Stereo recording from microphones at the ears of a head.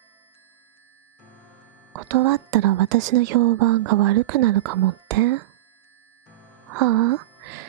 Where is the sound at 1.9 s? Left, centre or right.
Right.